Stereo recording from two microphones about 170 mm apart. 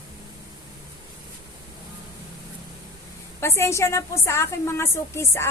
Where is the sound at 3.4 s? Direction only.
15° left (ahead or behind).